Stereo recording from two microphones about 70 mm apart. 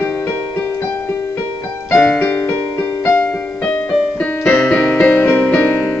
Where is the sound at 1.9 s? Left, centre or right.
Centre.